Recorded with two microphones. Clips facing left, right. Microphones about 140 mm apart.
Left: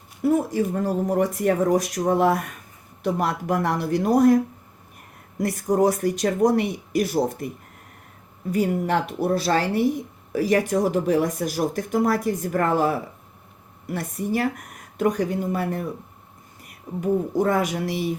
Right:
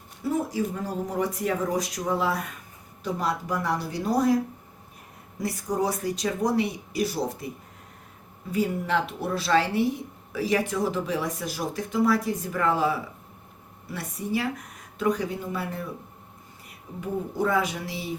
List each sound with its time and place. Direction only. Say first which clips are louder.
0.2 s speech: left 6 dB; 55° left (ahead or behind)
5.4 s speech: left 7 dB; 50° left (ahead or behind)
8.5 s speech: left 3 dB; 45° left (ahead or behind)
13.9 s speech: left 4 dB; 50° left (ahead or behind)
17.0 s speech: left 6 dB; 45° left (ahead or behind)